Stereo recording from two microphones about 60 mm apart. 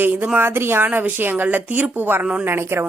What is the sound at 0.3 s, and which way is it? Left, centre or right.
Speech, right.